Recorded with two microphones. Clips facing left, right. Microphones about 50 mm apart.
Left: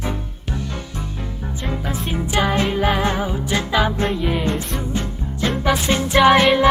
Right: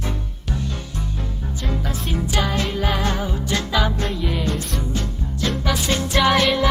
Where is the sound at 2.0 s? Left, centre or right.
Centre.